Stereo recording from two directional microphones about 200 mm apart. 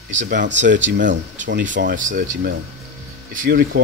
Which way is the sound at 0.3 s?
65° right (ahead or behind).